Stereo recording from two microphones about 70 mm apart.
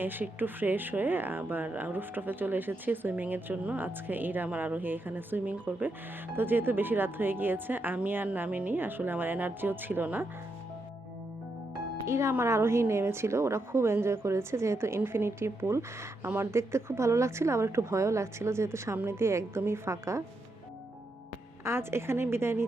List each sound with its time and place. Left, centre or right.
0.0 s speech: right
12.0 s a woman's voice: right
21.6 s a woman's voice: right